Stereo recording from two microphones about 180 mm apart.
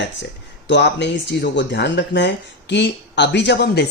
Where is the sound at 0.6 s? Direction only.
75° left (ahead or behind).